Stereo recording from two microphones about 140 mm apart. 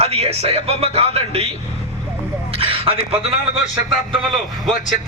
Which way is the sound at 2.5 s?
40° right (ahead or behind).